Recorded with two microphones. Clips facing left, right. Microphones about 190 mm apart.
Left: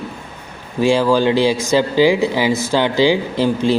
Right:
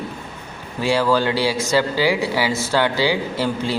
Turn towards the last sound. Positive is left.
turn(degrees=15)  # may be behind; listen again after turning